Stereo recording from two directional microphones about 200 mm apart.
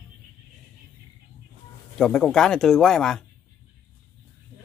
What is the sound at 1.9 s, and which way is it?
Speech, 5° left (ahead or behind).